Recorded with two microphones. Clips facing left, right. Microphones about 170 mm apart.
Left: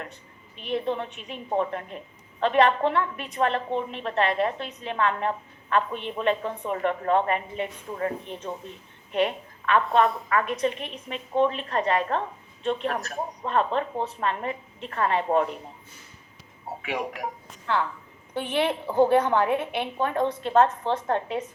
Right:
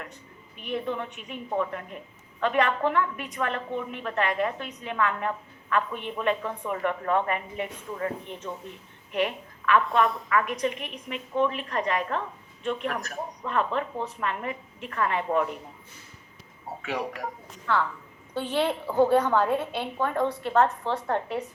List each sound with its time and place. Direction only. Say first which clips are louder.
0.5 s a woman's voice: left 3 dB; 30° left (ahead or behind)
9.1 s a woman's voice: left 3 dB; 25° left (ahead or behind)
18.3 s a woman's voice: left 1 dB; 20° left (ahead or behind)